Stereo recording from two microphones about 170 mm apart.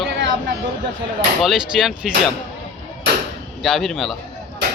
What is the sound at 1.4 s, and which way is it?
Speech, centre (ahead or behind).